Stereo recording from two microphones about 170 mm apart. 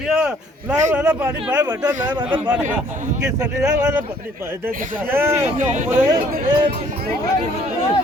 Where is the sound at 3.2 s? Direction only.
15° right (ahead or behind).